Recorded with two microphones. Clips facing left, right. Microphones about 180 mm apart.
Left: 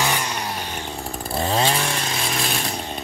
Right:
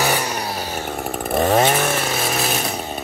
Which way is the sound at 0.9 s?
65° right (ahead or behind).